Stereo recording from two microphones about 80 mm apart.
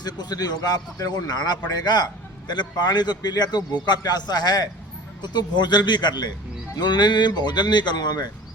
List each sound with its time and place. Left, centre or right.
0.0 s speech: left